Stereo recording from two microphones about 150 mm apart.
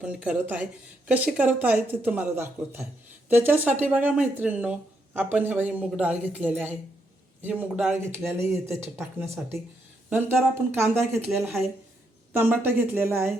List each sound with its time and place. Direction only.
0.0 s speech: 5° right (ahead or behind)
11.1 s speech: centre (ahead or behind)
12.3 s speech: 15° right (ahead or behind)